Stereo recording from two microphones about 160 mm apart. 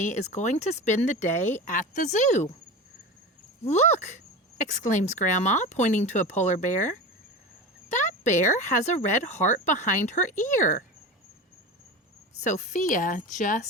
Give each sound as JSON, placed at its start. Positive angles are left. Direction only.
{"t": 0.0, "sound": "speech", "side_deg": 50}
{"t": 3.6, "sound": "speech", "side_deg": 45}
{"t": 7.9, "sound": "speech", "side_deg": 50}
{"t": 12.4, "sound": "speech", "side_deg": 50}